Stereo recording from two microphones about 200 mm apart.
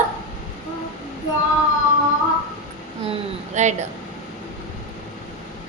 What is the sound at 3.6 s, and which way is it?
Speech, 35° right (ahead or behind).